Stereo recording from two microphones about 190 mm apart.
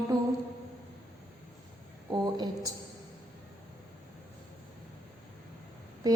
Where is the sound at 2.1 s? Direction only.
20° right (ahead or behind).